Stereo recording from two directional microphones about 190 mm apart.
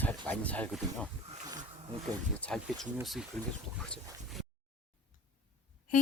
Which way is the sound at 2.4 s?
5° left (ahead or behind).